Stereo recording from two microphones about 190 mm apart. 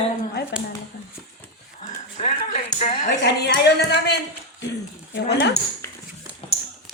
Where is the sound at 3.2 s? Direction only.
60° left (ahead or behind).